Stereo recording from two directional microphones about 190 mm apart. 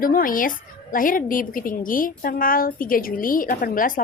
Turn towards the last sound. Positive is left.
turn(degrees=45)  # may be behind; listen again after turning